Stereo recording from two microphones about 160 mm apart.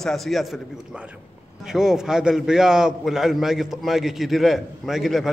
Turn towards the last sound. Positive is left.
turn(degrees=0)  # may be behind; listen again after turning